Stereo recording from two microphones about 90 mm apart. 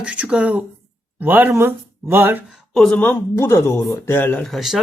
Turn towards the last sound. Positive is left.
turn(degrees=0)  # may be behind; listen again after turning